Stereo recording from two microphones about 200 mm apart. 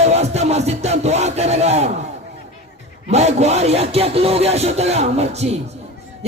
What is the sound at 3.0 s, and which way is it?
Music, 35° right (ahead or behind).